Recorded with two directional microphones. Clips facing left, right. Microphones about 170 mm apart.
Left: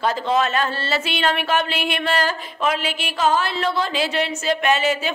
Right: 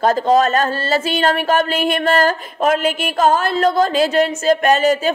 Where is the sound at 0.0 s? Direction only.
45° right (ahead or behind).